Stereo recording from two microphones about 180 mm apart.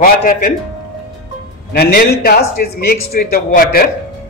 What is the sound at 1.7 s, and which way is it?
A man's voice, 60° left (ahead or behind).